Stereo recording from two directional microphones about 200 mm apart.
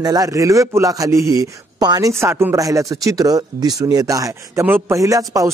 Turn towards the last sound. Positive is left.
turn(degrees=-15)  # may be behind; listen again after turning